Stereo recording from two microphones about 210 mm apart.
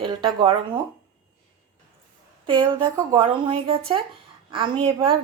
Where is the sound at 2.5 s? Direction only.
20° right (ahead or behind).